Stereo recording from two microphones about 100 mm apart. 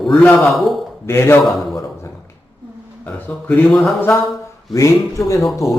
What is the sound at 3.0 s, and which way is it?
Speech, 15° left (ahead or behind).